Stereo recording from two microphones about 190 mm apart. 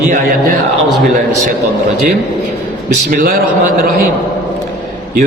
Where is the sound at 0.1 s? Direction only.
50° right (ahead or behind).